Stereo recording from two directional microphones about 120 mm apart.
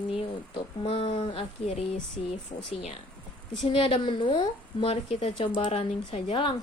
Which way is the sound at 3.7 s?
50° left (ahead or behind).